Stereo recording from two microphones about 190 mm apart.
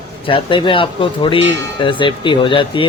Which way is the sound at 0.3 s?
25° left (ahead or behind).